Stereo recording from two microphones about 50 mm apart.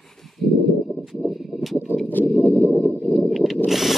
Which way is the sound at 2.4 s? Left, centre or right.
Left.